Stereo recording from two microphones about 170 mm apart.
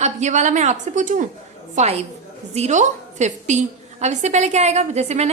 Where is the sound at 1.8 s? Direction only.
40° right (ahead or behind).